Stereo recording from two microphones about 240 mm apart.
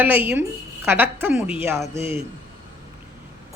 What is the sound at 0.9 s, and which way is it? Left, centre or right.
Speech, centre.